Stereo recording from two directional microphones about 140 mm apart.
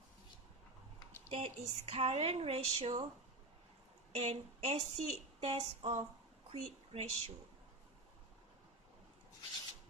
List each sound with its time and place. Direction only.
1.3 s speech: 45° right (ahead or behind)
4.1 s speech: 50° right (ahead or behind)